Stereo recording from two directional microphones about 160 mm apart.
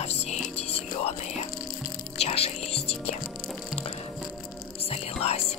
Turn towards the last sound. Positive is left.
turn(degrees=40)  # may be behind; listen again after turning